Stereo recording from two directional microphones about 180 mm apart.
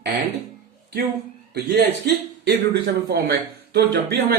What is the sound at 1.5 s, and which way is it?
A man's voice, 60° right (ahead or behind).